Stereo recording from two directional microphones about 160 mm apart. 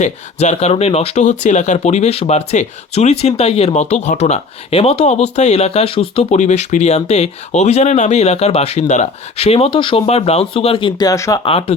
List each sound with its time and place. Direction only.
0.0 s speech: 45° left (ahead or behind)
6.3 s speech: 45° left (ahead or behind); by 11.3 s 20° left (ahead or behind)
11.4 s speech: 35° left (ahead or behind)